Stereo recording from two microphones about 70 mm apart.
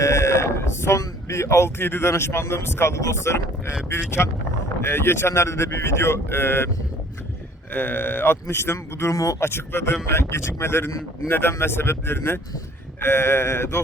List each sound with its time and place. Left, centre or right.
0.0 s speech: left
4.8 s speech: left
7.7 s speech: left
9.1 s speech: left
9.4 s speech: left